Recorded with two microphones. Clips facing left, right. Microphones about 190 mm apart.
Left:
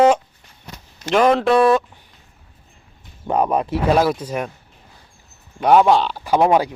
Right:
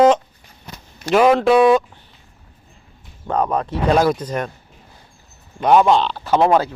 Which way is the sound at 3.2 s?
10° left (ahead or behind).